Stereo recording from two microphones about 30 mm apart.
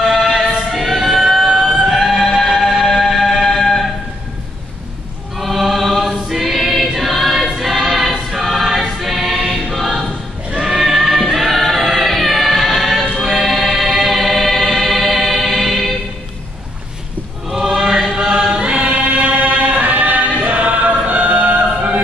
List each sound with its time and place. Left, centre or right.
0.0 s singing: centre
0.4 s music: centre
2.9 s music: centre
3.4 s music: centre
5.4 s choir: centre
8.5 s music: centre
9.8 s choir: centre
13.5 s music: centre
14.5 s choir: centre
17.7 s music: centre
18.5 s choir: right